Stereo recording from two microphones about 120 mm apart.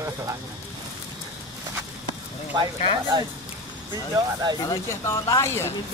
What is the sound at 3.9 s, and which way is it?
Speech, 30° right (ahead or behind).